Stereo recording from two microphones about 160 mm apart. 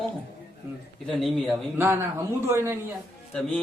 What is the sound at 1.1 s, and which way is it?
Speech, centre (ahead or behind).